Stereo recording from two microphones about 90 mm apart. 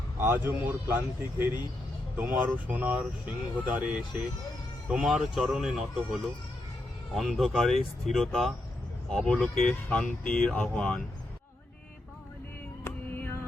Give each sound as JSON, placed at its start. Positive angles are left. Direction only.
{"t": 0.2, "sound": "speech", "side_deg": -25}
{"t": 12.8, "sound": "music", "side_deg": 20}